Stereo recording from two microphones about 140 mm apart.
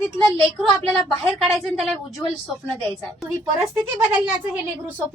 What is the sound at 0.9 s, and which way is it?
A woman's voice, centre (ahead or behind).